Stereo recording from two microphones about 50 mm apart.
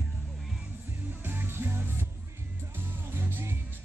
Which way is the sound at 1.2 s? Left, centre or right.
Right.